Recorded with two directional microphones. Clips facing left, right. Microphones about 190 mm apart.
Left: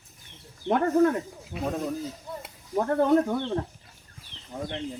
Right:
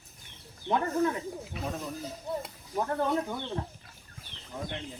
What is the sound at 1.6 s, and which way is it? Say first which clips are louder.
Speech: left 8 dB; 50° left (ahead or behind).